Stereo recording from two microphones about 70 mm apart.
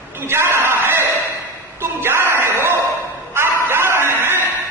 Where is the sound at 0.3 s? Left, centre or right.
Right.